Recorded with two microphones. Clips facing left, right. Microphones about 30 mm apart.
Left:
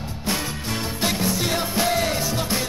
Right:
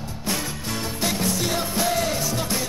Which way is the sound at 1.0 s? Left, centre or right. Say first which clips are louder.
Left 1 dB; left.